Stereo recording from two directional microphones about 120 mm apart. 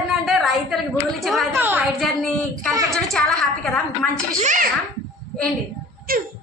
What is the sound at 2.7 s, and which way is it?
Speech, 30° right (ahead or behind).